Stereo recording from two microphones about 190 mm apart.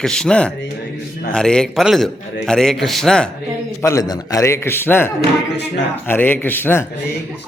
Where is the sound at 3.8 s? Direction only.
15° left (ahead or behind).